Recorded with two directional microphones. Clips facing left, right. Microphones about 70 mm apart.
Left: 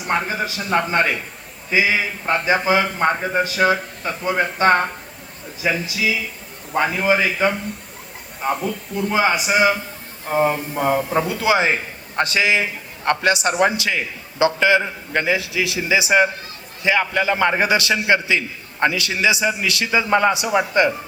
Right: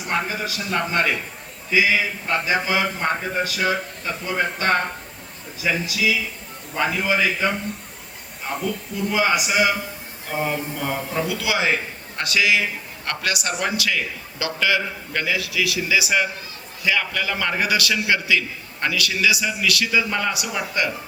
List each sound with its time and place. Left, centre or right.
0.1 s a man's voice: left
9.1 s a man's voice: left